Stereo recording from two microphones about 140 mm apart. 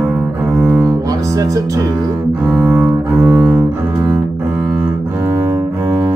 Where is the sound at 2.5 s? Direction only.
10° right (ahead or behind).